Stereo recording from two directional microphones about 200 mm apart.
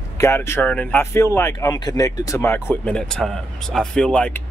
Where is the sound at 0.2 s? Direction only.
15° left (ahead or behind).